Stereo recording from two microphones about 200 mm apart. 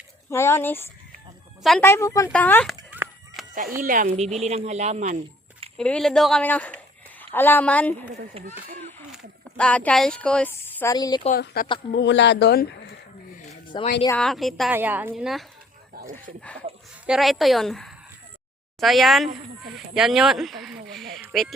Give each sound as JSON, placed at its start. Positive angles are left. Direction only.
{"t": 0.3, "sound": "speech", "side_deg": 15}
{"t": 2.9, "sound": "a sound", "side_deg": -10}
{"t": 3.8, "sound": "speech", "side_deg": -40}
{"t": 4.4, "sound": "speech", "side_deg": -30}
{"t": 5.7, "sound": "a woman's voice", "side_deg": 5}
{"t": 8.4, "sound": "speech", "side_deg": -30}
{"t": 9.1, "sound": "speech", "side_deg": 5}
{"t": 11.3, "sound": "speech", "side_deg": 50}
{"t": 13.7, "sound": "speech", "side_deg": 25}
{"t": 14.1, "sound": "speech", "side_deg": 5}
{"t": 16.0, "sound": "speech", "side_deg": -45}
{"t": 17.1, "sound": "speech", "side_deg": 0}